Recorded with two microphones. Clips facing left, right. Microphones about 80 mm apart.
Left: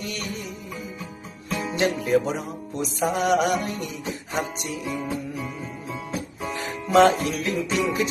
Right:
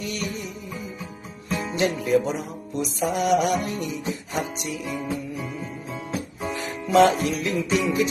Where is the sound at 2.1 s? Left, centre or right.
Left.